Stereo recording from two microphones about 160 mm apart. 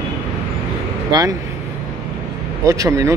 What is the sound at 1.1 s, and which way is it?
Speech, 30° right (ahead or behind).